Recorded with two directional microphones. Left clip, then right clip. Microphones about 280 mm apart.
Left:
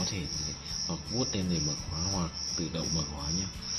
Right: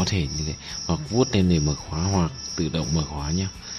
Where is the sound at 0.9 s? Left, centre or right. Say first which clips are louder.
Right 13 dB; right.